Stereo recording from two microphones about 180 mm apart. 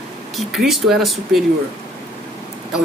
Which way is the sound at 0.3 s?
Centre (ahead or behind).